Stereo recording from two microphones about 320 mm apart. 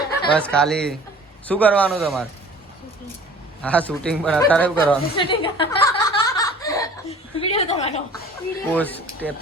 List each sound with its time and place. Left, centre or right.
0.3 s speech: centre
3.6 s speech: centre
5.1 s snicker: centre
8.7 s speech: centre